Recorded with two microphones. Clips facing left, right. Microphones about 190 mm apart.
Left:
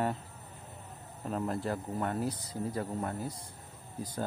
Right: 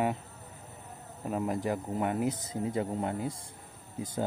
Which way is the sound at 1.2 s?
10° right (ahead or behind).